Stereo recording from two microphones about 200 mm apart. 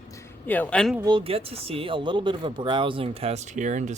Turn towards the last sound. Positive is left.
turn(degrees=-40)  # may be behind; listen again after turning